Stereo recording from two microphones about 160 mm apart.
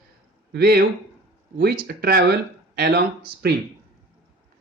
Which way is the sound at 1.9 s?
70° right (ahead or behind).